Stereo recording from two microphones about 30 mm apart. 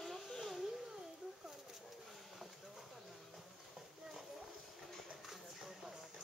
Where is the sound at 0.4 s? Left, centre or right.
Centre.